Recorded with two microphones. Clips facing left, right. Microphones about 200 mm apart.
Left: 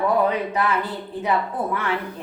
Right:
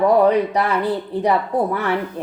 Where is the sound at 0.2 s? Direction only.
35° right (ahead or behind).